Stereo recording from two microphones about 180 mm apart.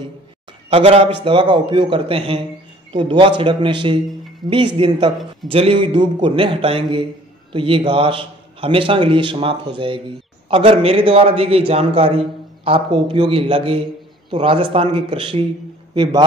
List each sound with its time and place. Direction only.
0.7 s a man's voice: 35° right (ahead or behind)